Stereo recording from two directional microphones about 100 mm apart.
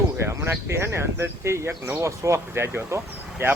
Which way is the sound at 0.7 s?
25° right (ahead or behind).